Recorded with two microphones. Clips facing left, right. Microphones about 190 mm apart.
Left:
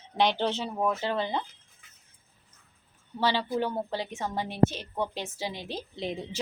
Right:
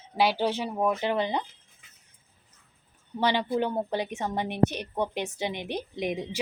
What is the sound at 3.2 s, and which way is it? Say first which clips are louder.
A woman's voice: right 2 dB; 15° right (ahead or behind).